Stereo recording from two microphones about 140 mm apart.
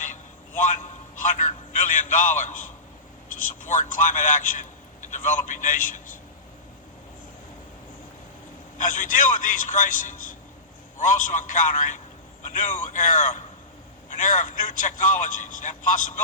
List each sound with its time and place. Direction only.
0.0 s a sound: 65° left (ahead or behind)
3.2 s a man's voice: 70° left (ahead or behind)
8.8 s a man's voice: 65° left (ahead or behind)